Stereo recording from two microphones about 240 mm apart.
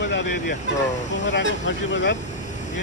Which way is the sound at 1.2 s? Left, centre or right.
Left.